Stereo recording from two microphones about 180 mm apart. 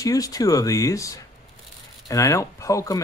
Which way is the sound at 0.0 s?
20° left (ahead or behind).